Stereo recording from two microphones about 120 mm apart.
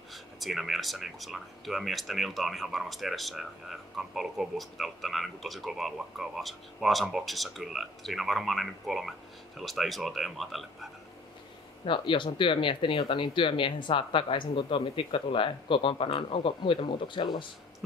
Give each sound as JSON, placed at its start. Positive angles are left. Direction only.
{"t": 0.1, "sound": "speech", "side_deg": 0}
{"t": 11.8, "sound": "speech", "side_deg": 45}